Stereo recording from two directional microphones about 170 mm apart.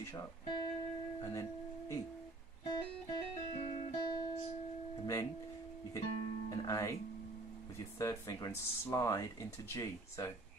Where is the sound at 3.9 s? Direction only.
25° left (ahead or behind).